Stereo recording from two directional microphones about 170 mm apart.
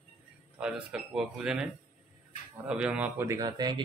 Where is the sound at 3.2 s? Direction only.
20° right (ahead or behind).